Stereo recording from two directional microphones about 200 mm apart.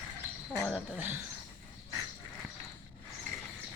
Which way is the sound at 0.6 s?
10° right (ahead or behind).